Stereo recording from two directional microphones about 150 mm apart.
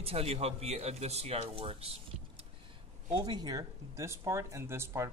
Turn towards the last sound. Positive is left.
turn(degrees=-15)  # may be behind; listen again after turning